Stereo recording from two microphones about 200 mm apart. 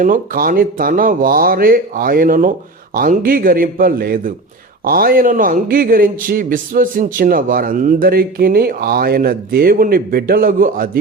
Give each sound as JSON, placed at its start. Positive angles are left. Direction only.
{"t": 0.0, "sound": "a man's voice", "side_deg": -45}